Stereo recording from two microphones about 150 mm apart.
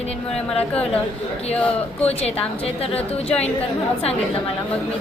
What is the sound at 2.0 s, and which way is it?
Speech, 45° left (ahead or behind).